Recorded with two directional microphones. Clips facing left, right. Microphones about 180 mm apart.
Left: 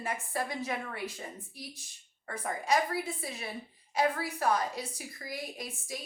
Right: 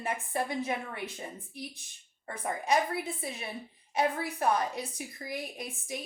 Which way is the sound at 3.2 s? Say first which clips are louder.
Right 1 dB; 25° right (ahead or behind).